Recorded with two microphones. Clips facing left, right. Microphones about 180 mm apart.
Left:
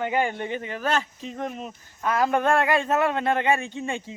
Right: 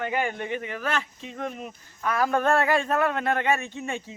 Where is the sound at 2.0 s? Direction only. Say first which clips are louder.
Left 1 dB; 25° left (ahead or behind).